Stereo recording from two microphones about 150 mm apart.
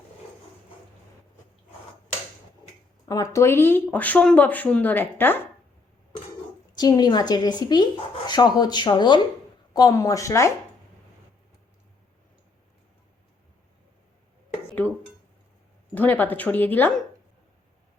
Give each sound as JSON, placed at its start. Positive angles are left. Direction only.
{"t": 3.1, "sound": "speech", "side_deg": 25}
{"t": 6.7, "sound": "a woman's voice", "side_deg": 25}
{"t": 16.0, "sound": "speech", "side_deg": 10}